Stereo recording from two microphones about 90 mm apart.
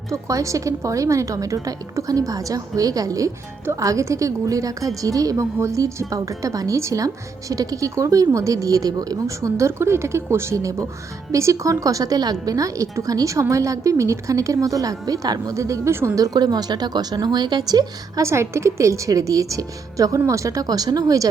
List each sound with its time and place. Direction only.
0.1 s a woman's voice: 35° right (ahead or behind)
18.3 s a woman's voice: 30° right (ahead or behind)